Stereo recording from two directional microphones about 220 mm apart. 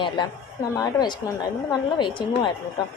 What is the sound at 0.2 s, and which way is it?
A woman's voice, 20° left (ahead or behind).